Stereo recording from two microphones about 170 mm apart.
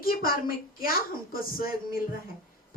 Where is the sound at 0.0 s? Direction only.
60° left (ahead or behind).